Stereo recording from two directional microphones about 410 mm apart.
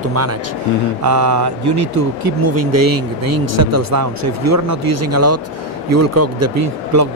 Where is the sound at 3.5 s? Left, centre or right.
Right.